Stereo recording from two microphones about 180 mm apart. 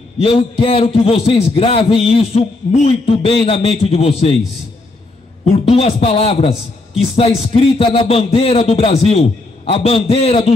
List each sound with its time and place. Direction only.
0.2 s a man's voice: 30° left (ahead or behind)
5.7 s a man's voice: 30° left (ahead or behind)